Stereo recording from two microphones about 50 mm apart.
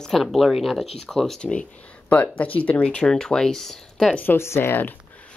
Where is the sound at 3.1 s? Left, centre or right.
Centre.